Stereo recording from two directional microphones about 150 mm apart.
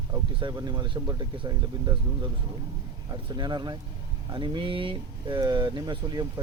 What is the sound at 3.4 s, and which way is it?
Speech, 30° right (ahead or behind).